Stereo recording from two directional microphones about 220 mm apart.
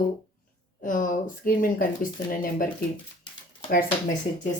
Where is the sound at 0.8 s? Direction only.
35° left (ahead or behind).